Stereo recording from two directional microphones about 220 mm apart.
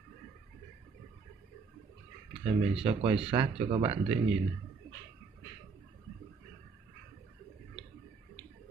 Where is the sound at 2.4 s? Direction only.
25° right (ahead or behind).